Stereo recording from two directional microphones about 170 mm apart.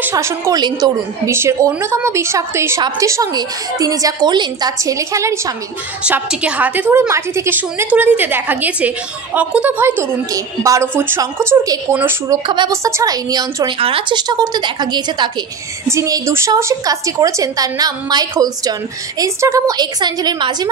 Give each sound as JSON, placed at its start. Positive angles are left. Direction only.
{"t": 0.0, "sound": "a woman's voice", "side_deg": -20}
{"t": 12.4, "sound": "a woman's voice", "side_deg": -25}